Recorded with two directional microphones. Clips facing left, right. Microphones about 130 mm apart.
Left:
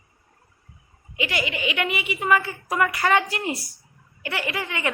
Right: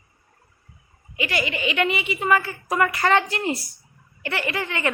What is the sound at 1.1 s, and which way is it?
A woman's voice, 15° left (ahead or behind).